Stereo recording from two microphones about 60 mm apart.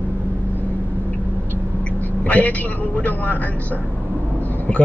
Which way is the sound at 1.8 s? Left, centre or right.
Left.